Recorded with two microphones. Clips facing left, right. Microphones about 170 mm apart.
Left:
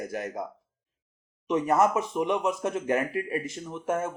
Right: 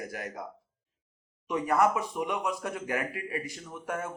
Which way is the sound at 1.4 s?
20° left (ahead or behind).